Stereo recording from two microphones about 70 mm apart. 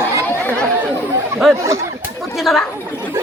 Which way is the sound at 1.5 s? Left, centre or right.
Right.